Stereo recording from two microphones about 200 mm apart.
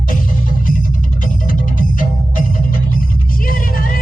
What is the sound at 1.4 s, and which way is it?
Music, 45° left (ahead or behind).